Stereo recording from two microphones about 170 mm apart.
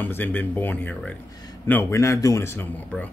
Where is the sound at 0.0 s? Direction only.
10° left (ahead or behind).